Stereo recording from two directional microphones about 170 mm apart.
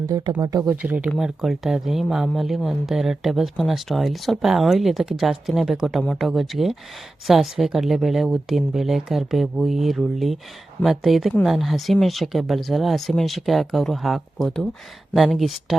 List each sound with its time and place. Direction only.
0.1 s speech: 25° right (ahead or behind)
0.8 s speech: 10° right (ahead or behind)